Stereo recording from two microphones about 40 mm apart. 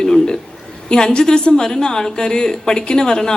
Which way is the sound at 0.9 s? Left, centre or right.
Centre.